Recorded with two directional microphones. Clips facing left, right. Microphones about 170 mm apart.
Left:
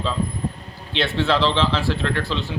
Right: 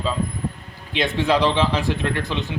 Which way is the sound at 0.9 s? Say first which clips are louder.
Right 1 dB; 15° right (ahead or behind).